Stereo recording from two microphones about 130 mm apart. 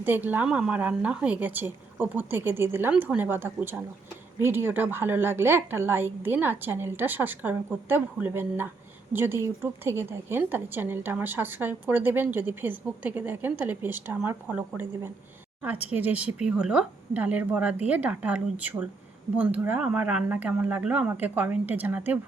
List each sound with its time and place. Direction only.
0.0 s a woman's voice: 15° right (ahead or behind)
15.6 s a woman's voice: 10° right (ahead or behind)